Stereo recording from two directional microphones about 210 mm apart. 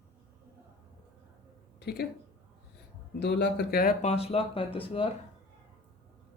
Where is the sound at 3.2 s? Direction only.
55° left (ahead or behind).